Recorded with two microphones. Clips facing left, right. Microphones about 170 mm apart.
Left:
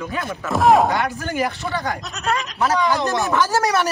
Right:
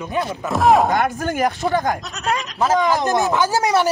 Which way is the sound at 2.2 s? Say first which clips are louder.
Even; centre (ahead or behind).